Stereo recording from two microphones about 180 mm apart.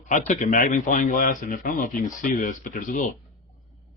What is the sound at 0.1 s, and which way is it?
Speech, 45° left (ahead or behind).